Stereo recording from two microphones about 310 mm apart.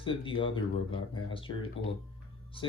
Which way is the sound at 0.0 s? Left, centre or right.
Centre.